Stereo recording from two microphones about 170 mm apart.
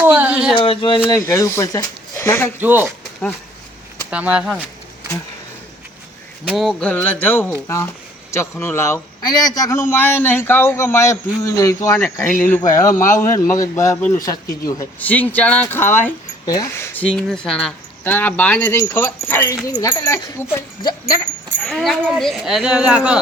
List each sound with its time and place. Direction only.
0.0 s speech: 10° right (ahead or behind)
0.5 s speech: 30° left (ahead or behind)
1.0 s a man's voice: 20° left (ahead or behind)
2.6 s speech: 10° right (ahead or behind)
4.1 s speech: 5° right (ahead or behind)
6.4 s a man's voice: centre (ahead or behind); by 20.9 s 20° left (ahead or behind)
21.6 s speech: centre (ahead or behind)